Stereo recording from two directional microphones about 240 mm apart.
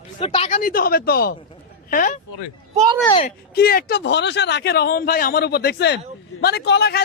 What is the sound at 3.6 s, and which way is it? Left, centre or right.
A man's voice, left.